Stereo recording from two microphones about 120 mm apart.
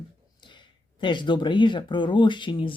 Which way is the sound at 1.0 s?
40° left (ahead or behind).